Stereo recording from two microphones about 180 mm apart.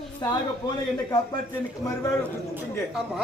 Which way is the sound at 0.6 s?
25° left (ahead or behind).